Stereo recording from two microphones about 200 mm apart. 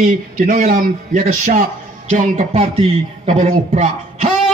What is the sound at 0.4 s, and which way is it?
A man's voice, 40° right (ahead or behind).